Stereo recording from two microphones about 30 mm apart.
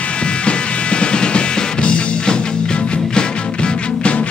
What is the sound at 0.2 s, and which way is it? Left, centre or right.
Music, left.